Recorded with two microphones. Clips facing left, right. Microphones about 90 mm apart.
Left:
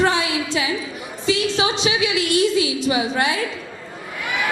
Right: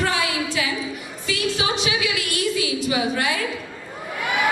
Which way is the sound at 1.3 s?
25° left (ahead or behind).